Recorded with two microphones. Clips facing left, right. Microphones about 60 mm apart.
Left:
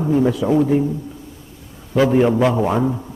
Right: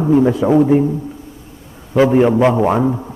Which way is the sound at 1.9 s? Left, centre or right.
Centre.